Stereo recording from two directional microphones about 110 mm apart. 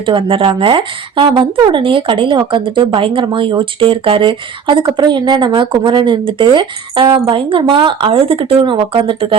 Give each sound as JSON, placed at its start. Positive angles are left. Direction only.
{"t": 0.0, "sound": "speech", "side_deg": -50}